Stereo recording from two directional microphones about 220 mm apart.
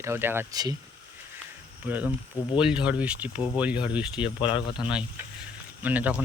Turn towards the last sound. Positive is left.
turn(degrees=-5)  # may be behind; listen again after turning